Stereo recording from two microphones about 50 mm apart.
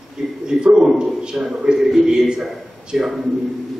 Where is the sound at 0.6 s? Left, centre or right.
Centre.